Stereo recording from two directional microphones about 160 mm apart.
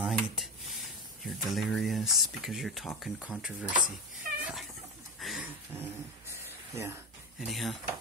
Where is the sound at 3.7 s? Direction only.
60° right (ahead or behind).